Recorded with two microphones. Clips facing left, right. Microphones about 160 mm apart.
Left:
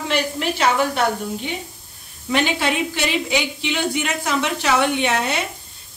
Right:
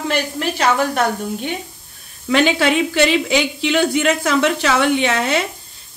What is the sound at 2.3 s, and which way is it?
A woman's voice, 90° right.